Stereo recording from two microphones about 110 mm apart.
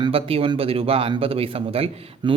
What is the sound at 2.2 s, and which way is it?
Speech, 45° right (ahead or behind).